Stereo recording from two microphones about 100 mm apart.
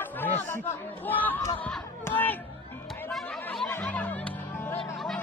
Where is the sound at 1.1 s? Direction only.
20° left (ahead or behind).